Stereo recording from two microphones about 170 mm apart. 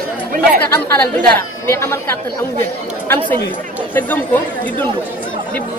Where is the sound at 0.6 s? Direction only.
10° left (ahead or behind).